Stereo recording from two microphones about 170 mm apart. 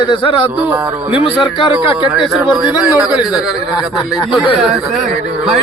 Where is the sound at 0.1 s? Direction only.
30° left (ahead or behind).